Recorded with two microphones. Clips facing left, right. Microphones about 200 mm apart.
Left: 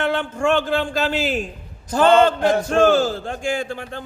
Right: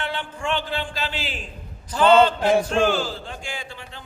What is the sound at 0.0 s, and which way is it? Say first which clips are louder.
A man's voice: left 8 dB; 45° left (ahead or behind).